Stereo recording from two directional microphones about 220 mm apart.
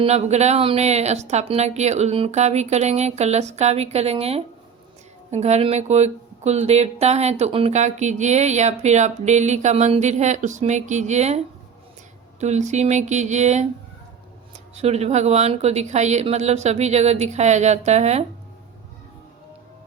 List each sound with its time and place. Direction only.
0.0 s speech: 30° right (ahead or behind)
12.4 s speech: 30° right (ahead or behind)
14.8 s speech: 30° right (ahead or behind)